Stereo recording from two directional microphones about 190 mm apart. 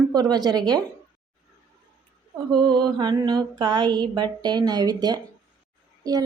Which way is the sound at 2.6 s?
25° right (ahead or behind).